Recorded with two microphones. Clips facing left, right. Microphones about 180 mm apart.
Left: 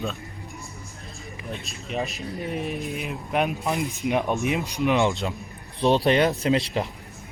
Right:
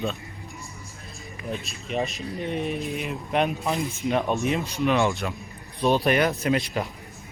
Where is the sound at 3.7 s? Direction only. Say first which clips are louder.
Even; 15° left (ahead or behind).